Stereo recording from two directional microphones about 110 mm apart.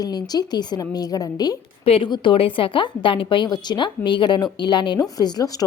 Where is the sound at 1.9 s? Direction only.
50° left (ahead or behind); by 5.6 s 35° left (ahead or behind).